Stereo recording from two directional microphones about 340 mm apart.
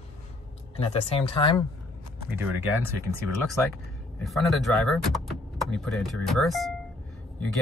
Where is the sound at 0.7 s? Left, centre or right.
Centre.